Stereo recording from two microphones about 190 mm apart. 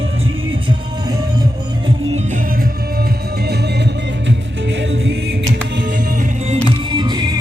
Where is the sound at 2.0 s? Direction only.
40° right (ahead or behind); by 5.9 s 65° right (ahead or behind).